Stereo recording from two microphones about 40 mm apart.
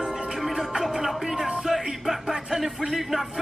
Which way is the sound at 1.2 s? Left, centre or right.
Centre.